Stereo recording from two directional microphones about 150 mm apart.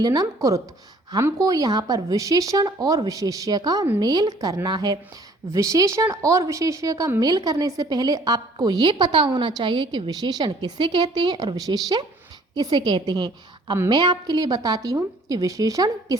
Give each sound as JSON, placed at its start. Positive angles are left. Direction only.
{"t": 0.0, "sound": "speech", "side_deg": -25}